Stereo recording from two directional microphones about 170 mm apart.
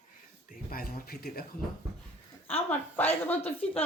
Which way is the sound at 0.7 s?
60° left (ahead or behind).